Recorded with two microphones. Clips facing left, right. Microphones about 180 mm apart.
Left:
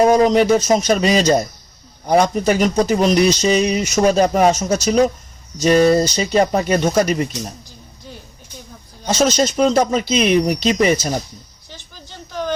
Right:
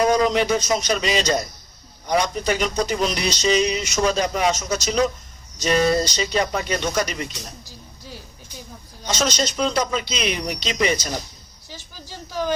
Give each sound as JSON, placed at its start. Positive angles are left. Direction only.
{"t": 0.0, "sound": "speech", "side_deg": 45}
{"t": 5.6, "sound": "speech", "side_deg": 35}
{"t": 9.1, "sound": "speech", "side_deg": 50}
{"t": 11.7, "sound": "a sound", "side_deg": -5}